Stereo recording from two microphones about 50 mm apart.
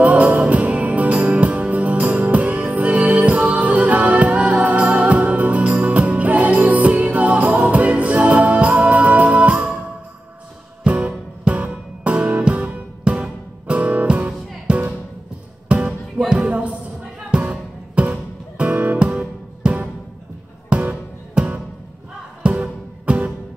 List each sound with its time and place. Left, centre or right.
0.3 s music: right
10.8 s music: centre
16.2 s music: centre
16.4 s music: right
20.7 s music: right